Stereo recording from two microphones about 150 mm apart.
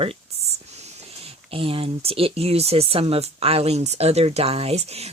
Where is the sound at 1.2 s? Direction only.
40° right (ahead or behind).